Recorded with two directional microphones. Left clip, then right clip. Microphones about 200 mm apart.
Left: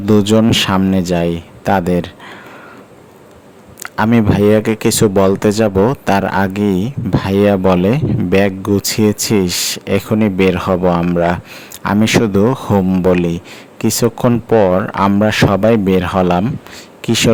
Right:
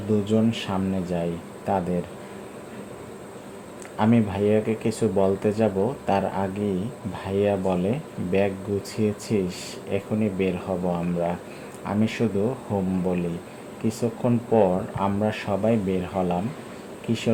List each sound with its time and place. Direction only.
0.1 s speech: 55° left (ahead or behind)
3.9 s speech: 45° left (ahead or behind)